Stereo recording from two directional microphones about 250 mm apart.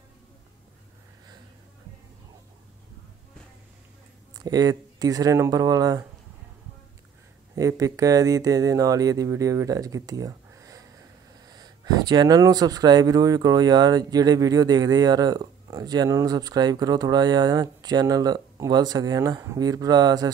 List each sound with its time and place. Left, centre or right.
4.4 s speech: centre
7.5 s speech: centre